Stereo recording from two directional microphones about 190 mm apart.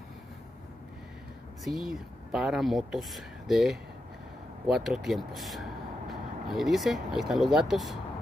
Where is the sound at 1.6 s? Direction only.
Centre (ahead or behind).